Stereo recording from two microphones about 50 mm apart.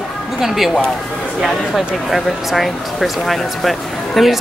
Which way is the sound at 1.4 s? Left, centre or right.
Centre.